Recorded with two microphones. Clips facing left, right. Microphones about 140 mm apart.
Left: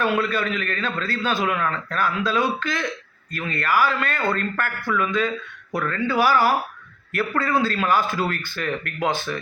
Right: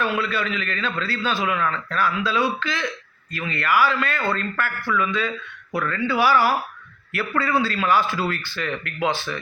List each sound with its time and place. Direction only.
0.0 s a man's voice: 45° left (ahead or behind)